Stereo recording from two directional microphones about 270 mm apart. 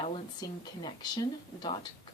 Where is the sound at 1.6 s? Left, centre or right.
Centre.